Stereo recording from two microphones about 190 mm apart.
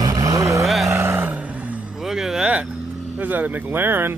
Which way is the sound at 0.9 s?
15° right (ahead or behind).